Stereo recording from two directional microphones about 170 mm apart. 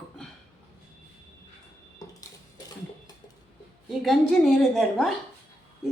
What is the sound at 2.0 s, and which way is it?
Cutlery, 20° left (ahead or behind).